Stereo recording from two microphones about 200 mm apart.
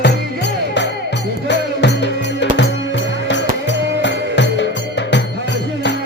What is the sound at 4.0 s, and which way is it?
Music, 60° left (ahead or behind).